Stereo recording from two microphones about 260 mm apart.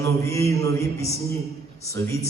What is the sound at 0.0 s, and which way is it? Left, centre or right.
A man's voice, centre.